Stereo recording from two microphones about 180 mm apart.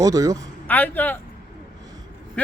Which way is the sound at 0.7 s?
10° left (ahead or behind).